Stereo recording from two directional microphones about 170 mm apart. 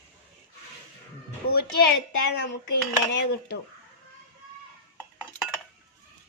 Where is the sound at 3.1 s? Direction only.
70° left (ahead or behind).